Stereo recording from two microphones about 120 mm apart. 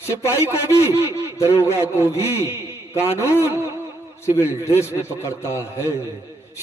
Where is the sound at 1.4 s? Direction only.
25° left (ahead or behind).